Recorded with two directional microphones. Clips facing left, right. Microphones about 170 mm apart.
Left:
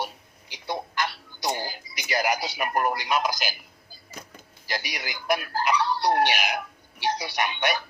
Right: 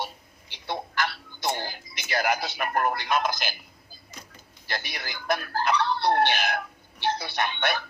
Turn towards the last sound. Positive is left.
turn(degrees=10)  # may be behind; listen again after turning